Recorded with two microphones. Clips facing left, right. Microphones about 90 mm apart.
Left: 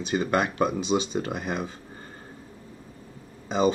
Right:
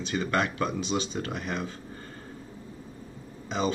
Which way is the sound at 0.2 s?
15° left (ahead or behind).